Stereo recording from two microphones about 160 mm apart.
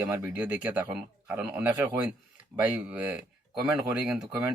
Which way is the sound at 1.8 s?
20° right (ahead or behind).